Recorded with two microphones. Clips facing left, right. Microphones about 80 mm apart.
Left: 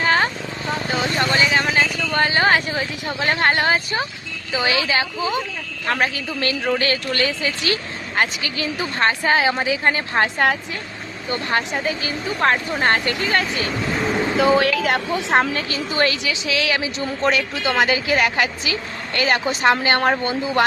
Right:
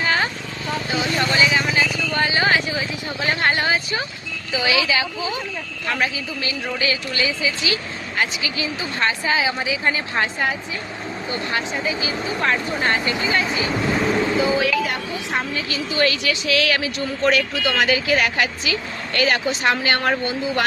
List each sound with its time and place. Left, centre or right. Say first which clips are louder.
0.0 s a sound: left 3 dB; left
0.9 s speech: left 1 dB; left
2.1 s vehicle: left 2 dB; left
4.5 s a woman's voice: even; left
6.1 s speech: left 3 dB; left
11.9 s speech: even; left
13.1 s speech: even; centre
13.9 s speech: right 1 dB; centre
14.3 s speech: left 3 dB; left
15.7 s a woman's voice: right 3 dB; left
16.2 s speech: right 2 dB; left